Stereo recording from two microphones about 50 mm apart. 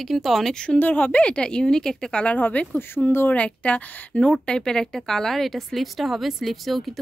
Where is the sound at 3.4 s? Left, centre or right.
Left.